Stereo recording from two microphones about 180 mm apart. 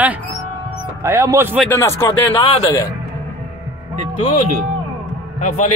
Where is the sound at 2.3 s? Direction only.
25° left (ahead or behind).